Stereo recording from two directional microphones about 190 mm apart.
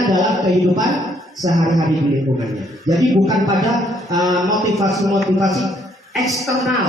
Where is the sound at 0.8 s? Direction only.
Centre (ahead or behind).